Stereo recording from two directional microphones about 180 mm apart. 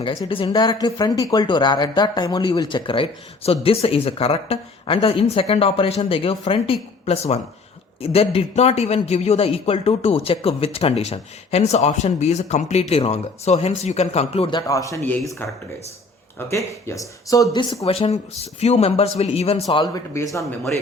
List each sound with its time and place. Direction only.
0.3 s speech: 25° left (ahead or behind)
14.7 s speech: 20° left (ahead or behind)
16.5 s speech: 15° left (ahead or behind)
17.8 s speech: 30° left (ahead or behind)
19.6 s speech: 20° left (ahead or behind)